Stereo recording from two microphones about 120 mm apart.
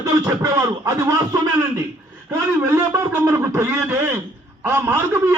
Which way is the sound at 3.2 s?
20° right (ahead or behind).